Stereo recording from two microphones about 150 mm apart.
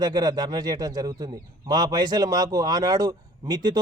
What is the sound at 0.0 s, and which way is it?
A man's voice, 30° right (ahead or behind).